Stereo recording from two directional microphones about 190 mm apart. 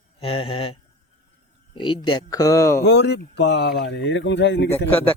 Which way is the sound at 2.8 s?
65° left (ahead or behind).